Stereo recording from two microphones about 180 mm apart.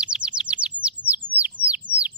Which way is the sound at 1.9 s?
25° right (ahead or behind).